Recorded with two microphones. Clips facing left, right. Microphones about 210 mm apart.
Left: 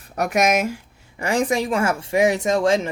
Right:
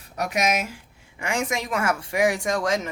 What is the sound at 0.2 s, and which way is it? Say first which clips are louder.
Speech: left 5 dB; 50° left (ahead or behind).